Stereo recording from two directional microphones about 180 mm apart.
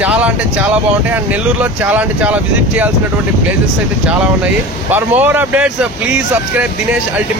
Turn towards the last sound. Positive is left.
turn(degrees=-10)  # may be behind; listen again after turning